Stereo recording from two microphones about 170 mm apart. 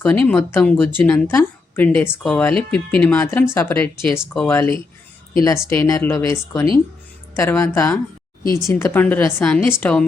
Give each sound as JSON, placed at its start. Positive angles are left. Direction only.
{"t": 0.0, "sound": "speech", "side_deg": 10}
{"t": 7.3, "sound": "speech", "side_deg": 15}